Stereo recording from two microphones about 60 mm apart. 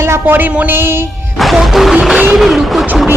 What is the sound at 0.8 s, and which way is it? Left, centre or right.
Music, right.